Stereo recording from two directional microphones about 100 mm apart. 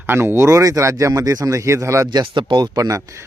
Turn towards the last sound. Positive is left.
turn(degrees=-35)  # may be behind; listen again after turning